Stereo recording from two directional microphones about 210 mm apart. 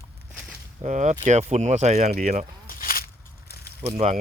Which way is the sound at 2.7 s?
45° left (ahead or behind).